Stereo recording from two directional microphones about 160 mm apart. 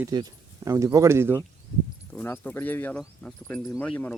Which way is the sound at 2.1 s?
10° left (ahead or behind).